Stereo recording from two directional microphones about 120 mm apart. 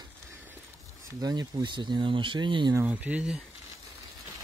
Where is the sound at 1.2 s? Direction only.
35° right (ahead or behind).